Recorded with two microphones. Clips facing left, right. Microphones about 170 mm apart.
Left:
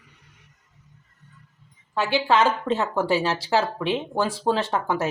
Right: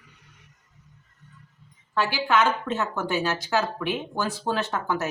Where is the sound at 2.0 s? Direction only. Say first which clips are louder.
Left 2 dB; 25° left (ahead or behind).